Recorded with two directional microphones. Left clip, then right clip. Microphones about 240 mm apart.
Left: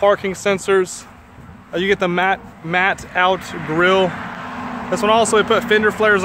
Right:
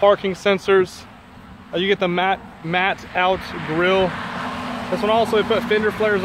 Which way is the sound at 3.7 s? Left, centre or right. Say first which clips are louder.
Left 3 dB; centre.